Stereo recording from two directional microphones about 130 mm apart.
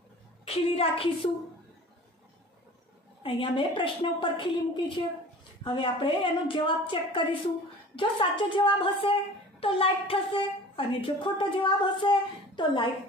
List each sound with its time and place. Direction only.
0.5 s a woman's voice: 45° left (ahead or behind)
3.2 s a woman's voice: 40° left (ahead or behind)